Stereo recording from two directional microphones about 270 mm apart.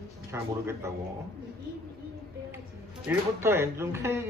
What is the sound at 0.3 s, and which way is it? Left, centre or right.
Speech, centre.